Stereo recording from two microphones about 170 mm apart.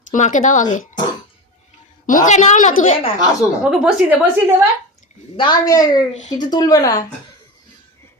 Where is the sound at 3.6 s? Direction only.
5° right (ahead or behind).